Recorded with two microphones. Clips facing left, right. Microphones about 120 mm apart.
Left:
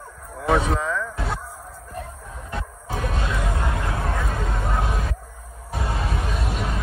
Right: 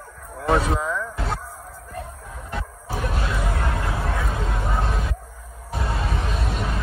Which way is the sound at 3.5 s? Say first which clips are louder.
Even; 20° left (ahead or behind).